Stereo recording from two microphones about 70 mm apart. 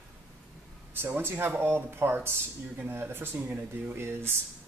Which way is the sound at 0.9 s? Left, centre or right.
Right.